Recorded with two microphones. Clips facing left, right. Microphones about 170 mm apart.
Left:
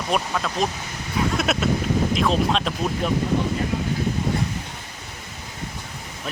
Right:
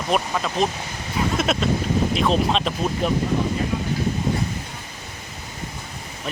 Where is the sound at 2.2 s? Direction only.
Centre (ahead or behind).